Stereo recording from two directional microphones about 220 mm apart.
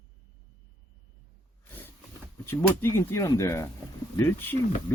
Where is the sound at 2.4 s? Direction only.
10° left (ahead or behind).